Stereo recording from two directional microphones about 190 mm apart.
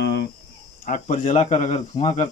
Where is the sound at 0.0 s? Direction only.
60° left (ahead or behind).